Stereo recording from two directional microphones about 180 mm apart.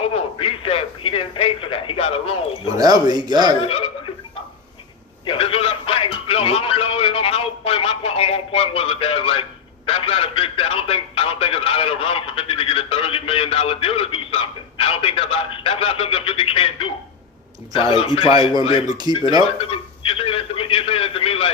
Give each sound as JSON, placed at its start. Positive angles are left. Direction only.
{"t": 0.0, "sound": "a man's voice", "side_deg": 30}
{"t": 2.7, "sound": "speech", "side_deg": -20}
{"t": 3.6, "sound": "chuckle", "side_deg": 30}
{"t": 5.2, "sound": "speech", "side_deg": 30}
{"t": 17.9, "sound": "speech", "side_deg": 30}
{"t": 18.9, "sound": "speech", "side_deg": -25}
{"t": 19.4, "sound": "speech", "side_deg": 30}